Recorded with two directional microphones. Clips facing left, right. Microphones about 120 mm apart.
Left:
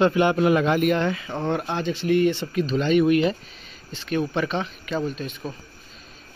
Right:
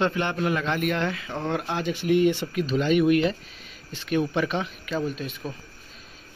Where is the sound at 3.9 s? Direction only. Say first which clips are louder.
Even; 10° right (ahead or behind).